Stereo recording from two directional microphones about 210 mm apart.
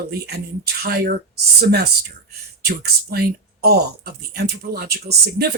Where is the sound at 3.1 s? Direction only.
50° right (ahead or behind).